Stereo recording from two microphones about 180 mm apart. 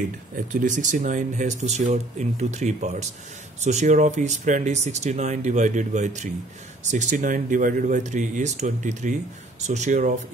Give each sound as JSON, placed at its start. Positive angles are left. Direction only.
{"t": 0.5, "sound": "speech", "side_deg": -45}